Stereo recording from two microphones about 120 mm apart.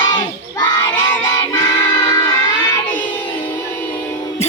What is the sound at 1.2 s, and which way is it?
Music, 30° left (ahead or behind).